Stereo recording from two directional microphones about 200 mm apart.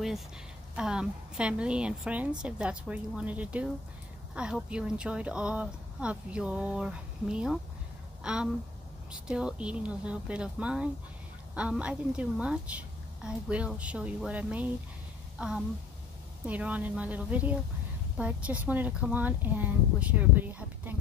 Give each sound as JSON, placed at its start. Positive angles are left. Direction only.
{"t": 0.7, "sound": "a woman's voice", "side_deg": -5}
{"t": 15.3, "sound": "a sound", "side_deg": 0}
{"t": 16.4, "sound": "a woman's voice", "side_deg": -5}